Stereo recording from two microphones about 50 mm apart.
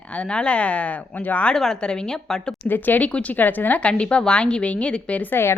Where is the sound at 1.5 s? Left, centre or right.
Centre.